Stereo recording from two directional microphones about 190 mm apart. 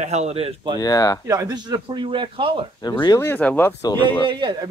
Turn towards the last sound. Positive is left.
turn(degrees=-25)  # may be behind; listen again after turning